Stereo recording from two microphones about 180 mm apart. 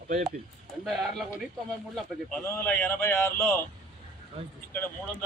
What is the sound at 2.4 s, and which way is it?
A man's voice, 10° left (ahead or behind).